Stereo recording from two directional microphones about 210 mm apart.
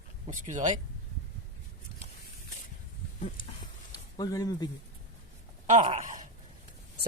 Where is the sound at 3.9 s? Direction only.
20° left (ahead or behind).